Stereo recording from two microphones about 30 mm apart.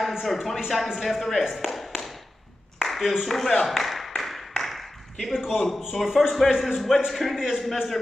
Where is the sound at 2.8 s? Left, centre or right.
Centre.